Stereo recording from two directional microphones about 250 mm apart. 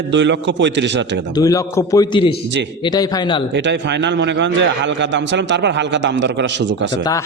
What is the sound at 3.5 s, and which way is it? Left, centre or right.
A man's voice, right.